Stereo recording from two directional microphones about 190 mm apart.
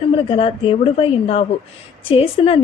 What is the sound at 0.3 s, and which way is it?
A woman's voice, 30° left (ahead or behind).